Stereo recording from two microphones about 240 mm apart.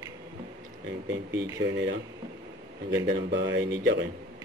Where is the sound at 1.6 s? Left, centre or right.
Right.